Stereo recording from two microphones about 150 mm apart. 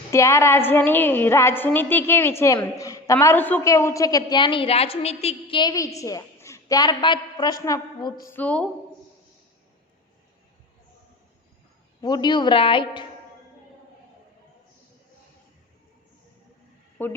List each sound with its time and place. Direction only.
0.1 s a woman's voice: 20° left (ahead or behind)
8.3 s speech: 10° left (ahead or behind)
12.0 s a woman's voice: 30° left (ahead or behind)
17.0 s speech: 15° left (ahead or behind)